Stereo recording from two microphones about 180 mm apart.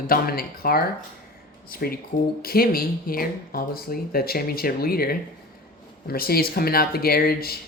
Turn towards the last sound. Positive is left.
turn(degrees=55)  # may be behind; listen again after turning